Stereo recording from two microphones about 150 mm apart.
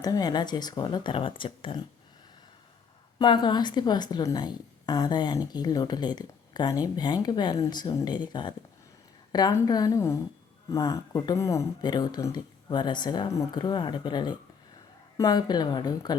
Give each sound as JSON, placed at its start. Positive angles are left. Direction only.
{"t": 0.0, "sound": "a woman's voice", "side_deg": 25}
{"t": 3.2, "sound": "a woman's voice", "side_deg": 30}